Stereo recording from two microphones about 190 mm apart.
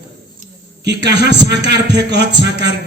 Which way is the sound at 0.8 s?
65° right (ahead or behind).